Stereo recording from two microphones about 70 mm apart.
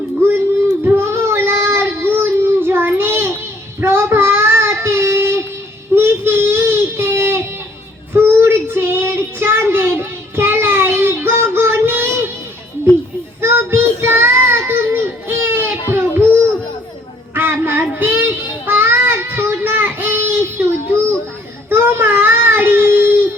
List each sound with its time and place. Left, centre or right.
0.9 s child singing: right
13.4 s child singing: right
17.3 s child singing: right
21.7 s baby cry: right